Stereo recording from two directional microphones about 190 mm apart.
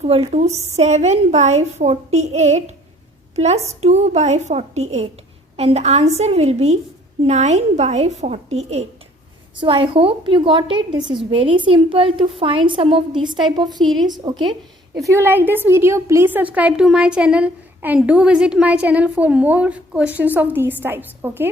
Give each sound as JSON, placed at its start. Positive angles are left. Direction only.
{"t": 0.0, "sound": "a woman's voice", "side_deg": -30}